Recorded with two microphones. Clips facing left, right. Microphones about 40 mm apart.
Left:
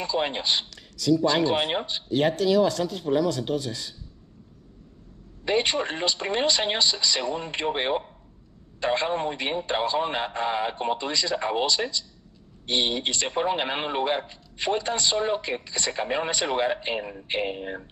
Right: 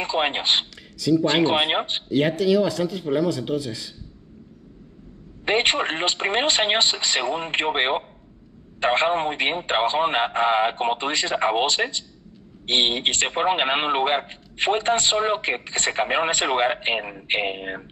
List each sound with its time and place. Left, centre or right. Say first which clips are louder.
0.0 s a man's voice: right 3 dB; right
2.3 s speech: right 1 dB; right
5.4 s a man's voice: right 3 dB; right